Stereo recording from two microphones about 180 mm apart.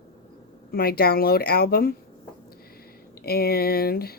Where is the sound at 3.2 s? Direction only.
60° left (ahead or behind).